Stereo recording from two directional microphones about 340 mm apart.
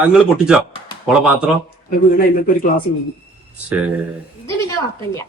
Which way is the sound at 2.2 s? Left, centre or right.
Left.